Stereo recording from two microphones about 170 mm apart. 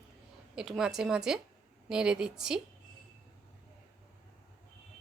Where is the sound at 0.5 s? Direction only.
5° right (ahead or behind).